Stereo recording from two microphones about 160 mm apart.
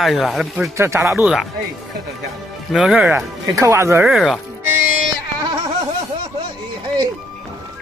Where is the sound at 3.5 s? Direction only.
20° right (ahead or behind).